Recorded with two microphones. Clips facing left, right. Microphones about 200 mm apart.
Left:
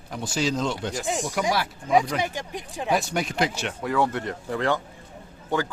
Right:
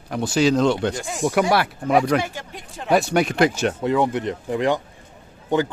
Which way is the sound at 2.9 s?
70° right (ahead or behind).